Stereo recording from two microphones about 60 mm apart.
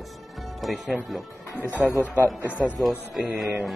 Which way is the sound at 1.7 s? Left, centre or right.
Right.